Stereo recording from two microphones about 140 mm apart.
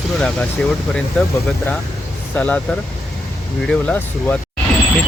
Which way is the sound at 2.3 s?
10° left (ahead or behind).